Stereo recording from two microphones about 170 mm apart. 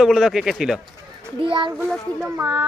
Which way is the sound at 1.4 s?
30° right (ahead or behind).